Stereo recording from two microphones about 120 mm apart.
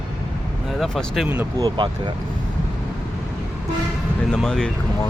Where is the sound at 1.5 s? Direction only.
30° right (ahead or behind).